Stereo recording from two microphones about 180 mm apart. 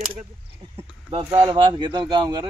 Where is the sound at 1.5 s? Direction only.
25° right (ahead or behind).